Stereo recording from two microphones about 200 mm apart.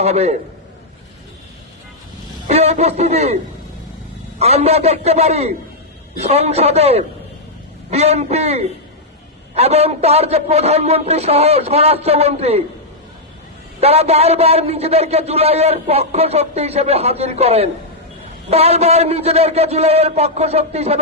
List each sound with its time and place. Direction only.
0.0 s a man's voice: 30° right (ahead or behind)
2.5 s a man's voice: 30° right (ahead or behind)
4.4 s a man's voice: 30° right (ahead or behind)
13.8 s a man's voice: 30° right (ahead or behind)